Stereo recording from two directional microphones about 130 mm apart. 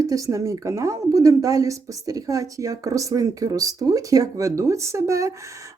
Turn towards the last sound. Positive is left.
turn(degrees=-25)  # may be behind; listen again after turning